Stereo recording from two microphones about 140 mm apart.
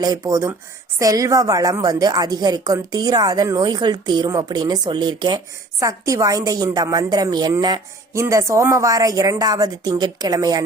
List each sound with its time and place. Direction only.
0.0 s a woman's voice: 25° right (ahead or behind)